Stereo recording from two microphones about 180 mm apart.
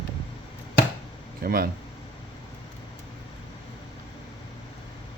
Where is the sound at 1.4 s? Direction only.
55° right (ahead or behind).